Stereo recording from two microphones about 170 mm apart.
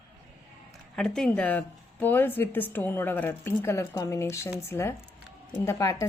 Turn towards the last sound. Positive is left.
turn(degrees=15)  # may be behind; listen again after turning